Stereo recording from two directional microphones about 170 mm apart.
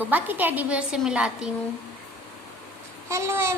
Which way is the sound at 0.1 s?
10° right (ahead or behind).